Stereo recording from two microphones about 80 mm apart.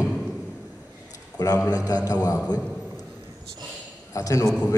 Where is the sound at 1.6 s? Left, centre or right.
Left.